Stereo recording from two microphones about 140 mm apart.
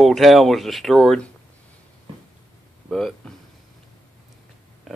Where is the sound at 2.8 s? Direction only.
Centre (ahead or behind).